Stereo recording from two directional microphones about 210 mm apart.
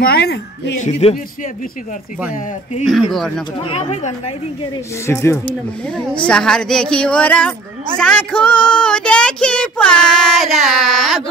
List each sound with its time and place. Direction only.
0.0 s a woman's voice: 50° left (ahead or behind)
0.7 s speech: 30° left (ahead or behind)
2.8 s speech: centre (ahead or behind)
3.6 s speech: 30° left (ahead or behind)
5.0 s speech: 15° left (ahead or behind)